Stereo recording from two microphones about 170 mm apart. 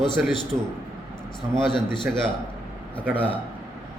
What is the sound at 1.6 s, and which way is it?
Speech, 30° left (ahead or behind).